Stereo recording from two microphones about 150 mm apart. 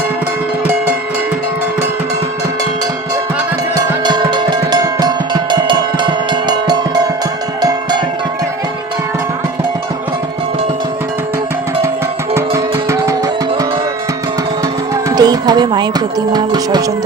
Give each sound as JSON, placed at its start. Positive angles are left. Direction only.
{"t": 3.8, "sound": "music", "side_deg": -30}
{"t": 12.3, "sound": "music", "side_deg": -20}
{"t": 15.1, "sound": "speech", "side_deg": -25}